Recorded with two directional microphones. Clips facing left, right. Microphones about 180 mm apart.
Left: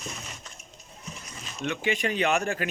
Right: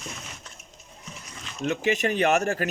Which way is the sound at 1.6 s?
40° right (ahead or behind).